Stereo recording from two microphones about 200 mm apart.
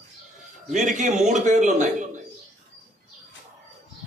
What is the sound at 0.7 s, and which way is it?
A man's voice, 40° right (ahead or behind).